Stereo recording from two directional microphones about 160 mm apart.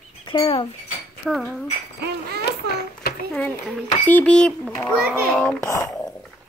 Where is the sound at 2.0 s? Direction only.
80° right.